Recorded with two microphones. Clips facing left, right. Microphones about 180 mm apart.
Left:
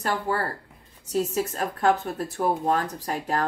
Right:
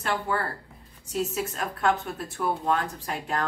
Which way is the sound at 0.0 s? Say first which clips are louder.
Left 2 dB; 40° left (ahead or behind).